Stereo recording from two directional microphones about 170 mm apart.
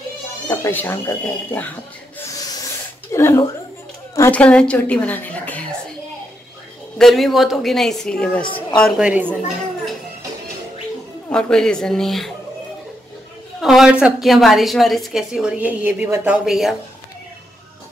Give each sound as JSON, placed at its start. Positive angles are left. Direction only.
{"t": 0.5, "sound": "a woman's voice", "side_deg": 15}
{"t": 3.1, "sound": "a woman's voice", "side_deg": 15}
{"t": 7.0, "sound": "a woman's voice", "side_deg": 0}
{"t": 11.2, "sound": "a woman's voice", "side_deg": 5}
{"t": 13.6, "sound": "a woman's voice", "side_deg": 0}